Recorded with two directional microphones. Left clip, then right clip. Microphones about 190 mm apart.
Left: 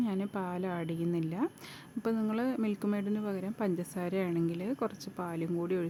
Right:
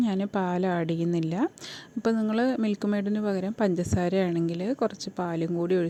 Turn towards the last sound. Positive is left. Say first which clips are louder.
# right 7 dB
turn(degrees=-25)  # may be behind; listen again after turning